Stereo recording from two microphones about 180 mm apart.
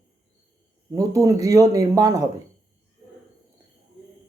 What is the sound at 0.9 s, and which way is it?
Speech, 20° right (ahead or behind).